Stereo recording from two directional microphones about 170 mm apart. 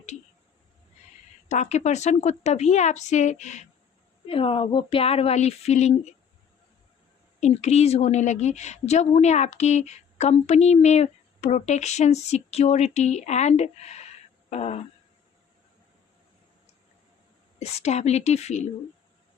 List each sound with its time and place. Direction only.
1.5 s a woman's voice: 40° left (ahead or behind)
4.3 s a woman's voice: 30° left (ahead or behind)
7.3 s a woman's voice: 40° left (ahead or behind)
17.6 s a woman's voice: 40° left (ahead or behind)